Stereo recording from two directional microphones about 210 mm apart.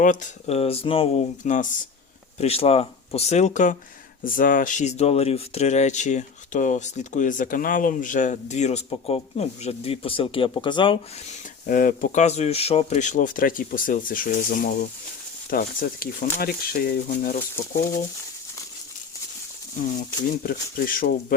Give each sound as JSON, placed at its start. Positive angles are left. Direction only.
{"t": 0.0, "sound": "speech", "side_deg": 40}
{"t": 11.6, "sound": "speech", "side_deg": 40}
{"t": 20.4, "sound": "speech", "side_deg": 45}